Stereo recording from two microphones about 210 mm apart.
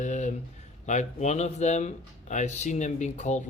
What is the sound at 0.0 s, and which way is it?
Speech, 35° left (ahead or behind).